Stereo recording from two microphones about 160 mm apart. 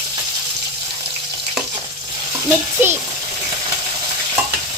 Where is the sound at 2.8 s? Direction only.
15° right (ahead or behind).